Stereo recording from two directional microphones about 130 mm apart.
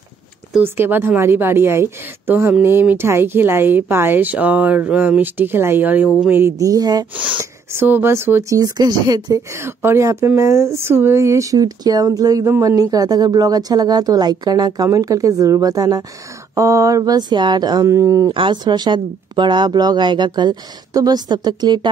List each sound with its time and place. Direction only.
0.6 s a woman's voice: 15° right (ahead or behind)
7.7 s speech: 15° right (ahead or behind)
18.3 s speech: 40° right (ahead or behind)